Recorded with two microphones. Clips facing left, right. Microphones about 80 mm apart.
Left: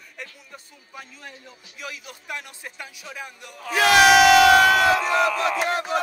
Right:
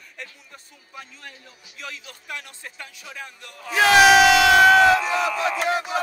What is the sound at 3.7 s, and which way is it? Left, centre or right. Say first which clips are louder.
Crowd: right 1 dB; right.